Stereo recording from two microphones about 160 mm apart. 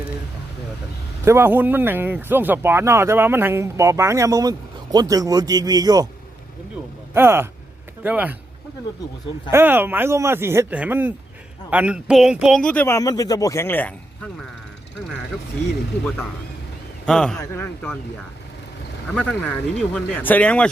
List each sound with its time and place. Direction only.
1.2 s speech: 15° right (ahead or behind)
7.1 s speech: 15° right (ahead or behind)
9.5 s speech: 15° right (ahead or behind); by 13.0 s 10° left (ahead or behind)
13.0 s speech: 20° left (ahead or behind)
17.1 s speech: 5° left (ahead or behind)
19.1 s speech: 10° left (ahead or behind)